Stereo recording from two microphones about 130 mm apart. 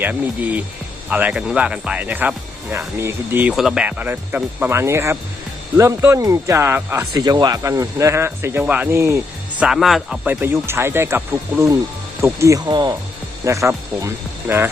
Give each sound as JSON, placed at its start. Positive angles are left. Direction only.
{"t": 0.0, "sound": "speech", "side_deg": -10}
{"t": 3.5, "sound": "speech", "side_deg": 0}
{"t": 9.6, "sound": "speech", "side_deg": -5}
{"t": 10.2, "sound": "speech", "side_deg": -15}
{"t": 12.2, "sound": "speech", "side_deg": -25}